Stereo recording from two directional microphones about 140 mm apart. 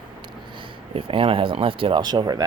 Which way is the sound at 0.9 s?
40° right (ahead or behind).